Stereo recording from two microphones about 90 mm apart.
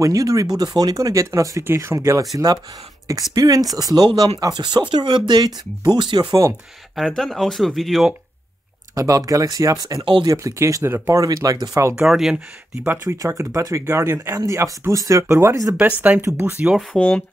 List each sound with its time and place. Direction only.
0.0 s speech: 40° right (ahead or behind)
1.6 s speech: 25° right (ahead or behind)
2.3 s speech: 45° right (ahead or behind)
7.1 s speech: 5° left (ahead or behind)
8.9 s speech: 40° right (ahead or behind)
9.9 s speech: 70° right (ahead or behind)
10.2 s speech: 40° right (ahead or behind)
11.9 s speech: 5° right (ahead or behind)
13.0 s speech: 35° right (ahead or behind)
16.0 s speech: 20° right (ahead or behind)
16.9 s speech: 10° left (ahead or behind)